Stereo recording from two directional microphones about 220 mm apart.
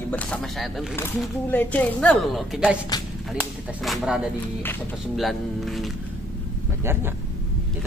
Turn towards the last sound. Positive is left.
turn(degrees=-10)  # may be behind; listen again after turning